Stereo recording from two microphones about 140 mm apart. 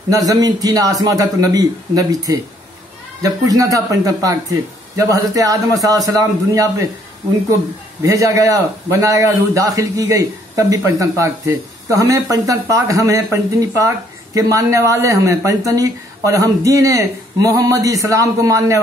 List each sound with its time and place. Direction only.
0.1 s a man's voice: 25° right (ahead or behind)
8.0 s a man's voice: 25° right (ahead or behind)